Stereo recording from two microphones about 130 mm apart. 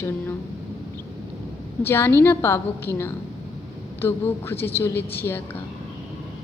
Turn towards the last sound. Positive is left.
turn(degrees=15)  # may be behind; listen again after turning